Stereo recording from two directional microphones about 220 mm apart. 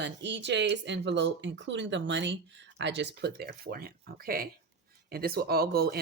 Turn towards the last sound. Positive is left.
turn(degrees=-45)  # may be behind; listen again after turning